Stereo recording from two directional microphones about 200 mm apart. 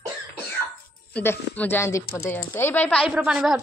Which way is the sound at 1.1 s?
10° left (ahead or behind).